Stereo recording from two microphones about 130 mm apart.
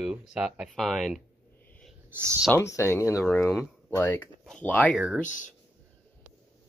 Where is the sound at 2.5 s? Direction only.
20° left (ahead or behind).